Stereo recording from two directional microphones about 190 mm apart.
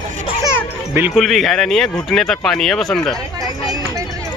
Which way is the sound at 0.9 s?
5° right (ahead or behind).